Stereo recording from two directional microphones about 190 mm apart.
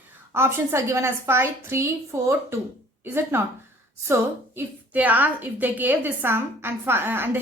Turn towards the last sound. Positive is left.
turn(degrees=-10)  # may be behind; listen again after turning